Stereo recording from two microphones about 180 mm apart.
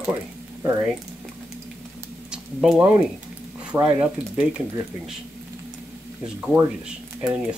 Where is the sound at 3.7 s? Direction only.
10° right (ahead or behind).